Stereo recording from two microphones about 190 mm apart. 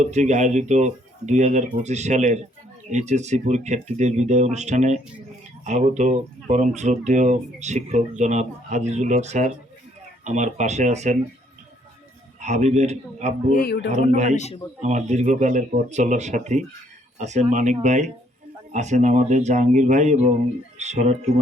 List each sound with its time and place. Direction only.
0.0 s speech: 40° right (ahead or behind)
12.4 s speech: 35° right (ahead or behind)
13.5 s speech: 55° left (ahead or behind)
14.3 s a man's voice: 35° left (ahead or behind)
14.8 s speech: 35° right (ahead or behind)